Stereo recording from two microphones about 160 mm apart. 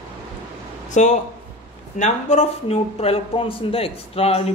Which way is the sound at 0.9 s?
50° left (ahead or behind).